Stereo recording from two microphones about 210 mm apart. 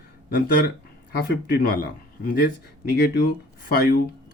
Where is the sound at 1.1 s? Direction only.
45° left (ahead or behind).